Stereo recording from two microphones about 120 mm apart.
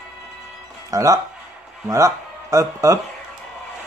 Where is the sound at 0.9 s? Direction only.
30° right (ahead or behind).